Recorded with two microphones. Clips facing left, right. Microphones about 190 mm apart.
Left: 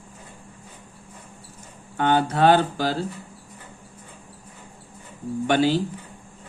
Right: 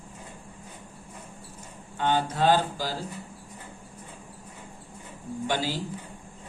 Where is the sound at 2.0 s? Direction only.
65° left (ahead or behind).